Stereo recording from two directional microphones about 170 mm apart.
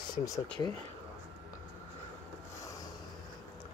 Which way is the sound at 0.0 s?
20° left (ahead or behind).